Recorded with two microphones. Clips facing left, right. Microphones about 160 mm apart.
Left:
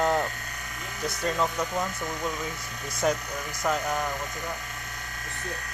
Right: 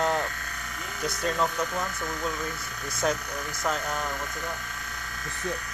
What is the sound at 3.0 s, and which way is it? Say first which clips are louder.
Speech: left 2 dB; 5° left (ahead or behind).